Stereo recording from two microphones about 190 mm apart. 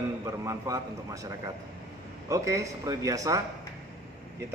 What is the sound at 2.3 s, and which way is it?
A man's voice, 15° right (ahead or behind).